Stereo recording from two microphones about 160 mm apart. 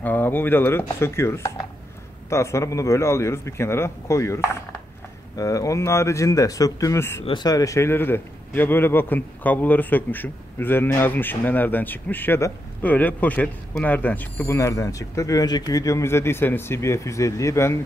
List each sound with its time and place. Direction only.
0.0 s a man's voice: 10° left (ahead or behind)